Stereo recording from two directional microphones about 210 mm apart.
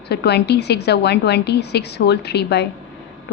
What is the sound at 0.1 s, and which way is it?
A woman's voice, 50° left (ahead or behind).